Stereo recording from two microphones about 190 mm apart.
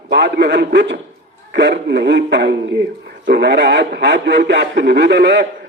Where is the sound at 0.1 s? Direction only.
65° right (ahead or behind).